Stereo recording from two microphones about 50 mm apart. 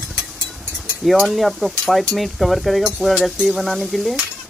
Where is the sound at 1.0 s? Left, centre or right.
Centre.